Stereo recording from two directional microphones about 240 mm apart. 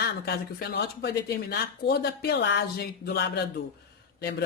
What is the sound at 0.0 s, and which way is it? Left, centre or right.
Speech, left.